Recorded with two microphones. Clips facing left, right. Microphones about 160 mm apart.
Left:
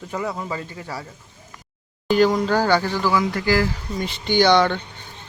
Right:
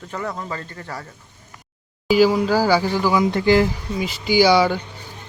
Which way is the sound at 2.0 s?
5° right (ahead or behind).